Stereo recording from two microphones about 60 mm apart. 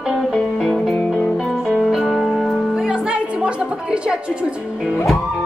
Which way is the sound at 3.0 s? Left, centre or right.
Centre.